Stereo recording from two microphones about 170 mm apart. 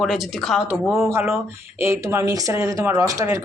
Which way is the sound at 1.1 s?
15° right (ahead or behind).